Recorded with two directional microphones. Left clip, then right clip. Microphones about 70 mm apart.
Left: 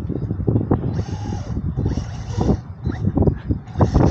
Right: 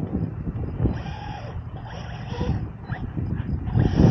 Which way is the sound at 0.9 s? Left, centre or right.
Left.